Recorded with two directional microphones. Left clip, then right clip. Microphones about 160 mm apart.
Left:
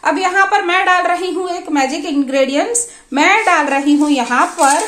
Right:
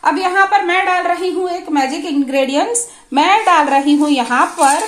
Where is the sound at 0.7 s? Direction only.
25° left (ahead or behind).